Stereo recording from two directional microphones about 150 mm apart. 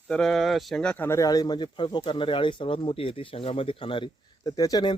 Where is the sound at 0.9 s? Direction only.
15° left (ahead or behind).